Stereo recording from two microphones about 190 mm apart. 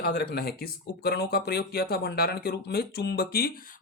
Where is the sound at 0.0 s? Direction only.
55° left (ahead or behind).